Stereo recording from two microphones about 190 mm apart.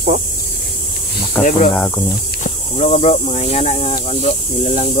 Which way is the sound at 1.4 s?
5° left (ahead or behind).